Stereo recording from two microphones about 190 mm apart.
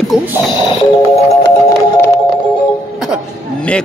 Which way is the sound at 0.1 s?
5° right (ahead or behind).